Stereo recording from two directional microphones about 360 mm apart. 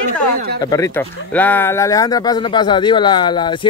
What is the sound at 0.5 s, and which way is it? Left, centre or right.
Speech, centre.